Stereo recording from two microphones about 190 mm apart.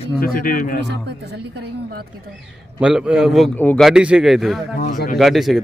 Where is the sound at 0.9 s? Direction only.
60° right (ahead or behind).